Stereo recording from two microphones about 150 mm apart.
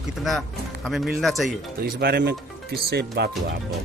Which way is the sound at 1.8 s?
90° right.